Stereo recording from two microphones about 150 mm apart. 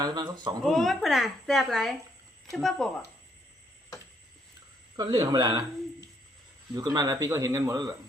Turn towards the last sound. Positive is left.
turn(degrees=-20)  # may be behind; listen again after turning